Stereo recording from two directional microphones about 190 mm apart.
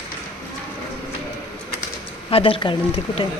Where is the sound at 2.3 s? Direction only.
30° left (ahead or behind).